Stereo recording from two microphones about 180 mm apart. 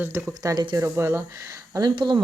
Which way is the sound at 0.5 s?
25° right (ahead or behind).